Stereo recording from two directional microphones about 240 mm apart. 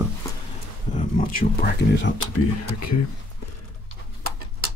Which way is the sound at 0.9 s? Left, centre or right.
Left.